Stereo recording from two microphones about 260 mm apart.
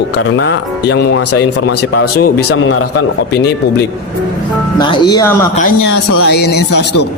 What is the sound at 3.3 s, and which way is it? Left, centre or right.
Speech, left.